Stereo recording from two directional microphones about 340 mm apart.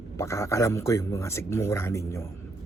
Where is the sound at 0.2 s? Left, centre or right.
Centre.